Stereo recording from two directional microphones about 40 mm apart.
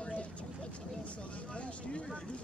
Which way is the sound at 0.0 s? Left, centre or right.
Left.